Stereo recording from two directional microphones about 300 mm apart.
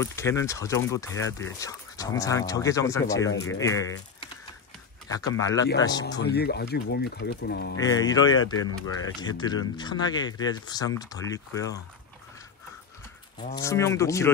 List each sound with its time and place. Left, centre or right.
0.0 s speech: centre
3.3 s speech: left
3.6 s speech: centre
5.3 s speech: centre
6.2 s speech: left
8.0 s speech: centre
13.6 s speech: centre